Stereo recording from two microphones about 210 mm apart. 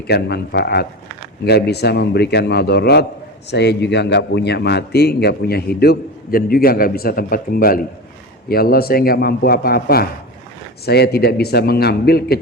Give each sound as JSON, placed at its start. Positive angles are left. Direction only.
{"t": 0.1, "sound": "a man's voice", "side_deg": 50}